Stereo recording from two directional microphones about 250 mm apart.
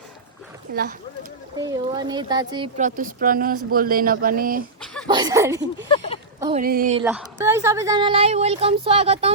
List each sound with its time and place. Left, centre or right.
1.5 s speech: centre
2.7 s speech: right
5.0 s speech: centre
6.5 s speech: right
7.0 s a woman's voice: centre; by 9.3 s right